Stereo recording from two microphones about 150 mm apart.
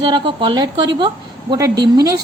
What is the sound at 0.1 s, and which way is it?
A woman's voice, 30° right (ahead or behind).